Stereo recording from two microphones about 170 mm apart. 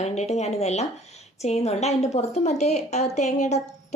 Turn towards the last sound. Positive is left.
turn(degrees=45)  # may be behind; listen again after turning